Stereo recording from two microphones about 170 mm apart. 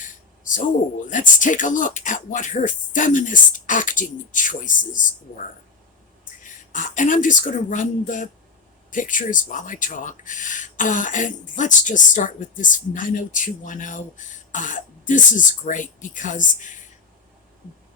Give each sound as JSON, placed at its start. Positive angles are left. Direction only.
{"t": 0.0, "sound": "a sound", "side_deg": 50}
{"t": 1.1, "sound": "speech", "side_deg": 50}
{"t": 6.7, "sound": "speech", "side_deg": 50}